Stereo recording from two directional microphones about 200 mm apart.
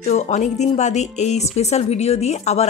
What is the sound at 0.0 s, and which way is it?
Speech, 35° left (ahead or behind).